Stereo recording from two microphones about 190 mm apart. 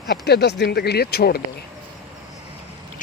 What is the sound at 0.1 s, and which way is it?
Speech, 60° left (ahead or behind).